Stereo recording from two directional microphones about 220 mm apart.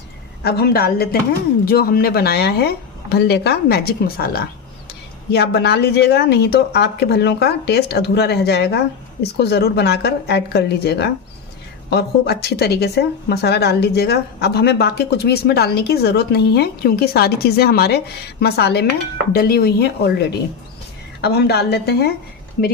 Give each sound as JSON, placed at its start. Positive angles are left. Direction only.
{"t": 0.4, "sound": "speech", "side_deg": 45}
{"t": 21.2, "sound": "speech", "side_deg": 50}